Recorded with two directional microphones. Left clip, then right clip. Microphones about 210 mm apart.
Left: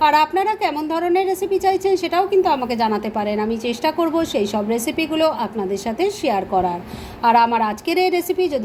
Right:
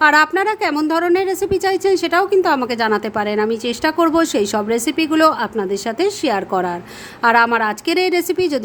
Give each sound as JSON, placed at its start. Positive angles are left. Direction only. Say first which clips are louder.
{"t": 0.0, "sound": "a woman's voice", "louder": "right 2 dB", "side_deg": -25}
{"t": 1.3, "sound": "a woman's voice", "louder": "right 1 dB", "side_deg": -65}
{"t": 2.0, "sound": "a woman's voice", "louder": "right 1 dB", "side_deg": -25}